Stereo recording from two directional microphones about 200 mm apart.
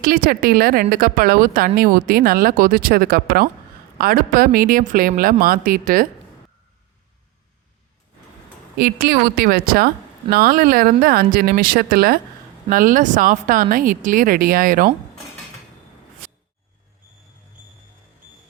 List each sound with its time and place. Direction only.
0.0 s speech: 45° right (ahead or behind)
8.8 s speech: 50° right (ahead or behind)